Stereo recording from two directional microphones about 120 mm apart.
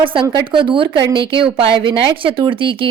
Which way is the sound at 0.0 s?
45° right (ahead or behind).